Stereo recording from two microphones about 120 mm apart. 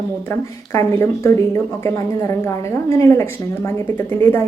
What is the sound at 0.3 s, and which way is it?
A woman's voice, 20° left (ahead or behind).